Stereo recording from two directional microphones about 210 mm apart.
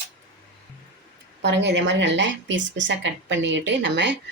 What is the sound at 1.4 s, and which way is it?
A woman's voice, 55° right (ahead or behind).